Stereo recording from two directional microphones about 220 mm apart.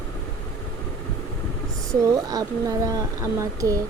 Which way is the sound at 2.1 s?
15° right (ahead or behind).